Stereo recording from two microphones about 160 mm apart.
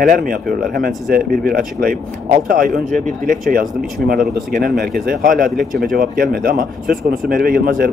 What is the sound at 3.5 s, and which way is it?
Speech, 65° right (ahead or behind).